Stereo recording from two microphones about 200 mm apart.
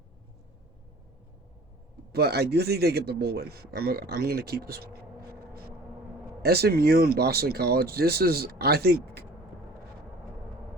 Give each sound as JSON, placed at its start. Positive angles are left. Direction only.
{"t": 2.1, "sound": "speech", "side_deg": -55}
{"t": 6.4, "sound": "speech", "side_deg": -50}